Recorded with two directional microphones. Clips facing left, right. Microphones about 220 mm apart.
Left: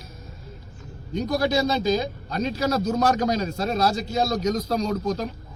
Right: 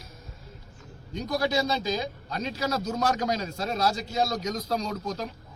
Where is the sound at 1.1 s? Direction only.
50° left (ahead or behind).